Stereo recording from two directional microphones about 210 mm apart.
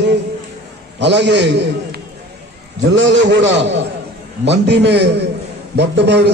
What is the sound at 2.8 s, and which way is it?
A man's voice, 60° right (ahead or behind).